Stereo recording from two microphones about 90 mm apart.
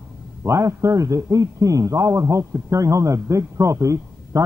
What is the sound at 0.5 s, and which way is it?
A man's voice, 35° right (ahead or behind).